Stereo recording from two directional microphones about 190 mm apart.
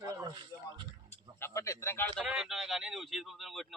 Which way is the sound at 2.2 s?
5° right (ahead or behind).